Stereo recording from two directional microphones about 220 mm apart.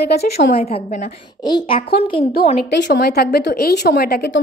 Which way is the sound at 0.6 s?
25° left (ahead or behind).